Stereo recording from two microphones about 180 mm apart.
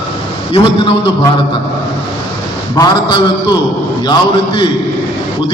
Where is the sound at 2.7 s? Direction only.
25° left (ahead or behind).